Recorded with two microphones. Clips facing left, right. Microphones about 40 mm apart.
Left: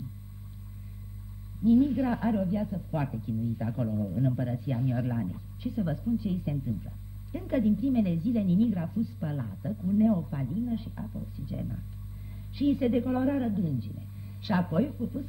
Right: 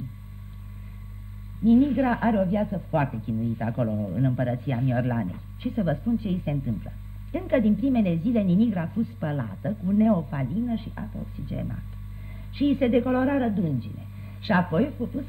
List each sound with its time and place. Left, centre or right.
1.6 s a woman's voice: right